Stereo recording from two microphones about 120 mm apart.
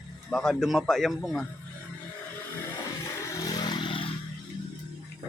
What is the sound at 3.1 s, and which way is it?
Vehicle, 25° left (ahead or behind).